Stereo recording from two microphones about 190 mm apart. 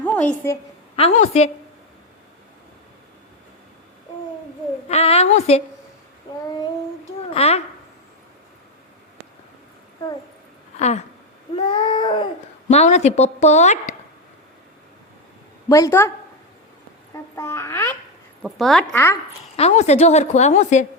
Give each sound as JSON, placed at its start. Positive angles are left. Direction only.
{"t": 0.0, "sound": "a woman's voice", "side_deg": 10}
{"t": 0.9, "sound": "speech", "side_deg": 35}
{"t": 4.9, "sound": "speech", "side_deg": 30}
{"t": 7.3, "sound": "speech", "side_deg": 30}
{"t": 10.8, "sound": "a sound", "side_deg": 35}
{"t": 11.5, "sound": "a sound", "side_deg": 25}
{"t": 12.6, "sound": "speech", "side_deg": 35}
{"t": 15.7, "sound": "a child's voice", "side_deg": 15}
{"t": 17.3, "sound": "a child's voice", "side_deg": 15}
{"t": 18.4, "sound": "a woman's voice", "side_deg": 0}
{"t": 19.5, "sound": "speech", "side_deg": 35}